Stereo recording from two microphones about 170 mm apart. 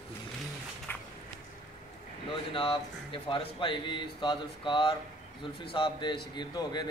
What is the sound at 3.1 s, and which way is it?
Speech, 30° left (ahead or behind).